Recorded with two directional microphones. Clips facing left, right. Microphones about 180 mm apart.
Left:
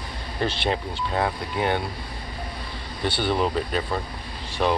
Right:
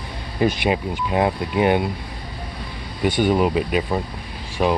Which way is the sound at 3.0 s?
10° right (ahead or behind).